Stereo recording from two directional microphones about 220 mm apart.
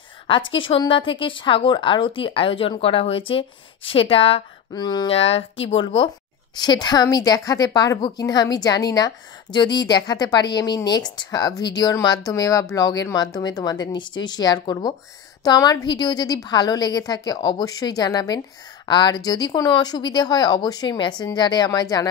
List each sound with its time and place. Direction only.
0.6 s a woman's voice: 25° left (ahead or behind)